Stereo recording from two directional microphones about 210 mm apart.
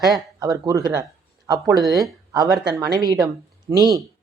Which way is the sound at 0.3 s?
20° right (ahead or behind).